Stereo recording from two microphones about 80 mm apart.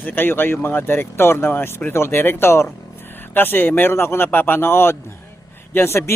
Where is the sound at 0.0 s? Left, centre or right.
Left.